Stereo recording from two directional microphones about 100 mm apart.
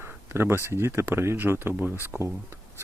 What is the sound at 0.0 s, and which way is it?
Speech, 25° right (ahead or behind).